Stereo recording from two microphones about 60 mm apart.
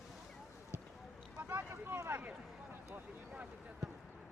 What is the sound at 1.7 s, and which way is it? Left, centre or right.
Boat, right.